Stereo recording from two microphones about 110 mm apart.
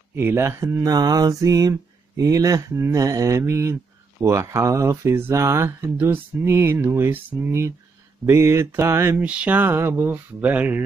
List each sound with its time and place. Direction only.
0.1 s speech: 20° right (ahead or behind)